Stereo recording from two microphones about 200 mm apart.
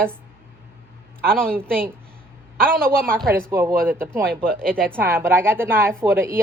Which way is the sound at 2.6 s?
45° right (ahead or behind).